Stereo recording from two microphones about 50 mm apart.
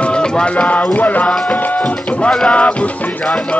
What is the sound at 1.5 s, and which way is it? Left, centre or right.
Speech, left.